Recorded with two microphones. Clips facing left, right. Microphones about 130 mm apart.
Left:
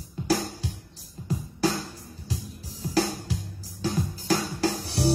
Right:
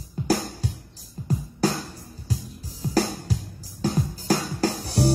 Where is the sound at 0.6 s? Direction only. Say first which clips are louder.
Right 4 dB; 45° right (ahead or behind).